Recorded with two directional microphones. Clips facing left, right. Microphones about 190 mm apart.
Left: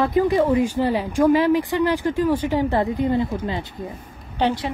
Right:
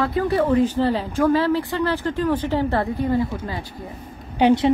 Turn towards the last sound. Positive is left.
turn(degrees=-15)  # may be behind; listen again after turning